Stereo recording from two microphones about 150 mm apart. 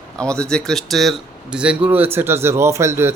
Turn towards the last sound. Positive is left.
turn(degrees=-15)  # may be behind; listen again after turning